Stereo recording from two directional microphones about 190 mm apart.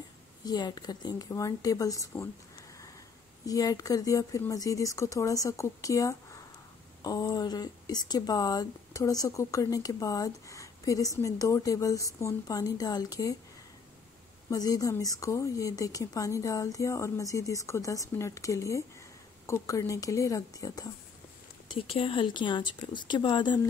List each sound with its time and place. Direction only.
0.5 s speech: 20° left (ahead or behind)
3.4 s a woman's voice: 20° left (ahead or behind)
14.5 s a woman's voice: 20° left (ahead or behind)